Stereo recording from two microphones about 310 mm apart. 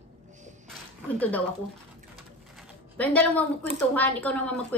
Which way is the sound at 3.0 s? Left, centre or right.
Centre.